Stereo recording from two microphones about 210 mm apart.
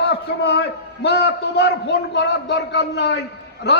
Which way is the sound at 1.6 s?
55° left (ahead or behind).